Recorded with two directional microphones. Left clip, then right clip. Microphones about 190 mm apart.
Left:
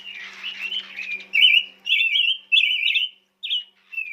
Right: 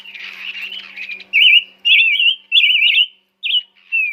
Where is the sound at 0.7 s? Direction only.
Centre (ahead or behind).